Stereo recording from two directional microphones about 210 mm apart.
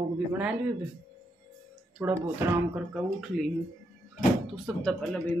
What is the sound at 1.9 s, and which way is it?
Speech, 5° right (ahead or behind).